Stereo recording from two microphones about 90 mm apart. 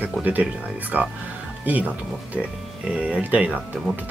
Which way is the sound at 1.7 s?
15° right (ahead or behind).